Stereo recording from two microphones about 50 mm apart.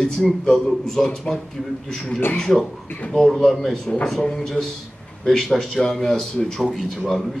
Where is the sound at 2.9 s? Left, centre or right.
Left.